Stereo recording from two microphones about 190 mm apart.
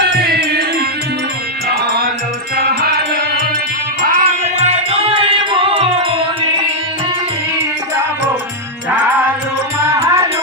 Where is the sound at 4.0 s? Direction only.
45° right (ahead or behind).